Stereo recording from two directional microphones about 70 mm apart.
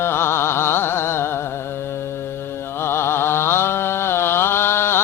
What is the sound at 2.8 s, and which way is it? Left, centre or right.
Mantra, left.